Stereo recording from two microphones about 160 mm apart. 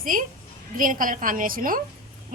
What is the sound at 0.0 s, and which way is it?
A woman's voice, 60° right (ahead or behind).